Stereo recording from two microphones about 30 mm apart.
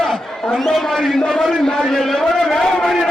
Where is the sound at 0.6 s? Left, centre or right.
Centre.